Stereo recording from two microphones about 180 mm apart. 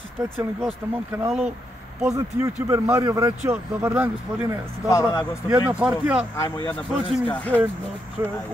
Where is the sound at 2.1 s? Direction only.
15° right (ahead or behind).